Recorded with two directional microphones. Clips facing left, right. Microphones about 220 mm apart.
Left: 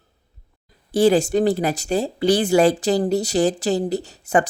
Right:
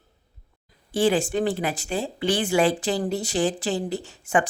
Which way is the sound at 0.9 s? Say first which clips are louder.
Left 5 dB; 40° left (ahead or behind).